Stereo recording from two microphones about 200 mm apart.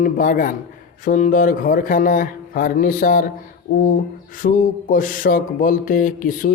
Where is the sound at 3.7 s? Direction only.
40° left (ahead or behind).